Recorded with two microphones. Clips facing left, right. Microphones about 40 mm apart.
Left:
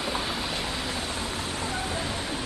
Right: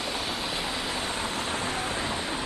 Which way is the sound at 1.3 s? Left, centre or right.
Right.